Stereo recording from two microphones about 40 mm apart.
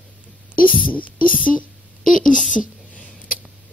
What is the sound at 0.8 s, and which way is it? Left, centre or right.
Speech, left.